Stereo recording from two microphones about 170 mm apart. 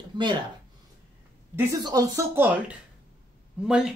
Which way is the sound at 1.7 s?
25° right (ahead or behind).